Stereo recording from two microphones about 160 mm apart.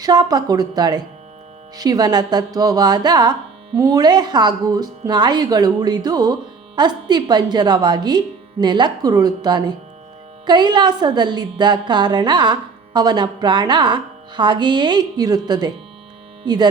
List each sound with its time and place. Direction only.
0.0 s a woman's voice: 25° right (ahead or behind)